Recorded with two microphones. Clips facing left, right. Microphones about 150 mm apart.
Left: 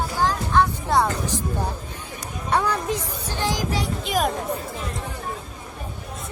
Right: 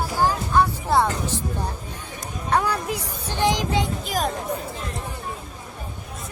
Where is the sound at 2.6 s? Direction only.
10° right (ahead or behind).